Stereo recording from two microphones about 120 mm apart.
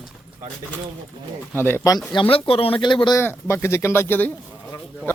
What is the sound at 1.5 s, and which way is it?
Speech, 20° left (ahead or behind).